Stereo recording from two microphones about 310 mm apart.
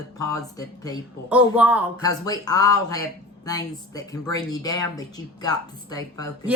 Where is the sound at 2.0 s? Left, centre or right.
Centre.